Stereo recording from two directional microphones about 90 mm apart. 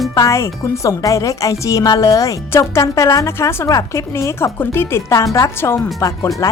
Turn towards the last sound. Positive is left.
turn(degrees=35)  # may be behind; listen again after turning